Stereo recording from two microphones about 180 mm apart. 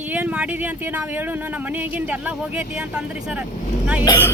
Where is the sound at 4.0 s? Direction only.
20° left (ahead or behind).